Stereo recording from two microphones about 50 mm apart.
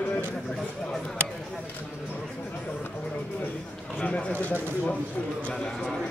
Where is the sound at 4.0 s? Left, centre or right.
Left.